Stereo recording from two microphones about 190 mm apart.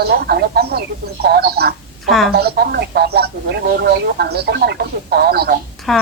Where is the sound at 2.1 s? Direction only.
Centre (ahead or behind).